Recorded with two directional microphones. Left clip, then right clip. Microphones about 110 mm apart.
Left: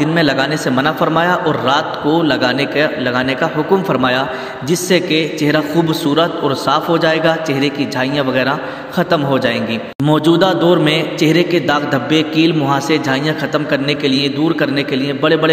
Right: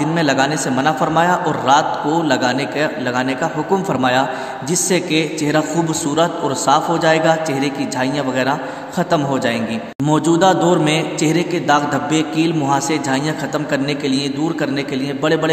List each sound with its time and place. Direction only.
0.0 s a man's voice: 20° left (ahead or behind)